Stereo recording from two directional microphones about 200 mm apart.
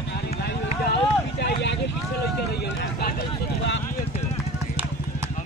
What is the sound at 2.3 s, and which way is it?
Run, 55° left (ahead or behind).